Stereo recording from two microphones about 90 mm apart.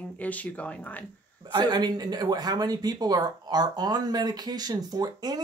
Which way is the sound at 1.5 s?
50° right (ahead or behind).